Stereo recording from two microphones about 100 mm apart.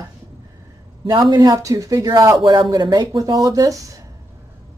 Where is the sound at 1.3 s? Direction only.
40° right (ahead or behind).